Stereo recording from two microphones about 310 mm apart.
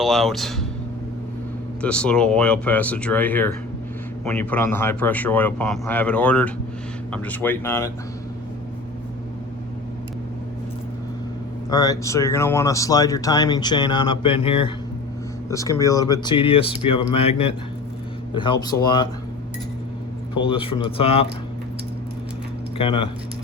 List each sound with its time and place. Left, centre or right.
0.0 s speech: centre
1.8 s speech: centre
11.7 s speech: centre
20.3 s speech: centre
22.8 s speech: centre